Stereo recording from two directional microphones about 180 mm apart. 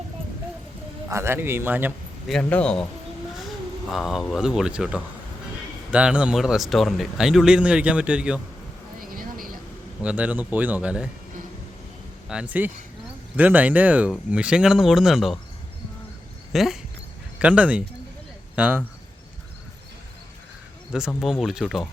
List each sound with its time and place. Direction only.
1.0 s speech: 15° right (ahead or behind)
2.2 s speech: 5° left (ahead or behind)
3.8 s speech: centre (ahead or behind)
9.0 s a sound: 50° right (ahead or behind)
10.0 s speech: 5° right (ahead or behind)
12.3 s speech: 5° right (ahead or behind)
16.5 s speech: centre (ahead or behind)
21.2 s speech: 5° right (ahead or behind)